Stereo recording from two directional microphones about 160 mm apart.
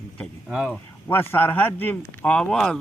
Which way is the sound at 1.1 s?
15° left (ahead or behind).